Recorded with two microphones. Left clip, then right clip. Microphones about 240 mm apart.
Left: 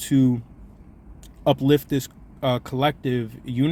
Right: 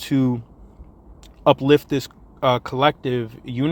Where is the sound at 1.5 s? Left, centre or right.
Centre.